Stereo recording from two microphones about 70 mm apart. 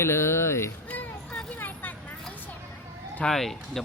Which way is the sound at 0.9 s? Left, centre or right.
Left.